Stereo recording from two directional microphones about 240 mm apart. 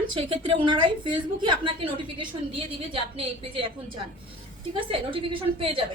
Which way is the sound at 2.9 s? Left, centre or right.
Right.